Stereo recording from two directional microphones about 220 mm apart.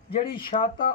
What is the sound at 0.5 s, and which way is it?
Speech, 35° left (ahead or behind).